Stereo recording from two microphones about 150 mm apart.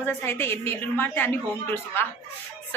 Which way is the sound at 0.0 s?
15° left (ahead or behind).